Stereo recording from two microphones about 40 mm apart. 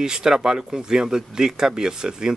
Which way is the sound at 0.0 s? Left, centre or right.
Centre.